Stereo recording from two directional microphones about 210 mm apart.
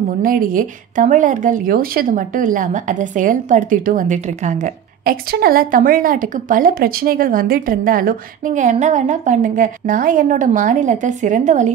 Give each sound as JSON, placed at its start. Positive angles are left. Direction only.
{"t": 0.2, "sound": "a woman's voice", "side_deg": -40}